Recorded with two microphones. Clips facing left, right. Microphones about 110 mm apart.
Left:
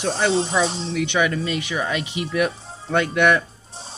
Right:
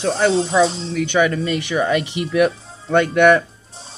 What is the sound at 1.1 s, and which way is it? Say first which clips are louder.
Speech: right 5 dB; 35° right (ahead or behind).